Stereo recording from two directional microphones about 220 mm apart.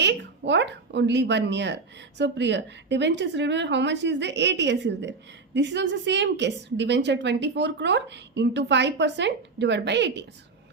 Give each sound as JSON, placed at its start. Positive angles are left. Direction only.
{"t": 0.0, "sound": "speech", "side_deg": -50}